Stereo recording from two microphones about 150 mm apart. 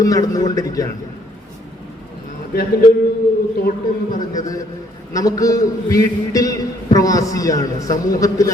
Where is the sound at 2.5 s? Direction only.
90° left.